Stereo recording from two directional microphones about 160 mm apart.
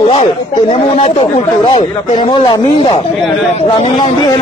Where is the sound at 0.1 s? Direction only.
40° left (ahead or behind).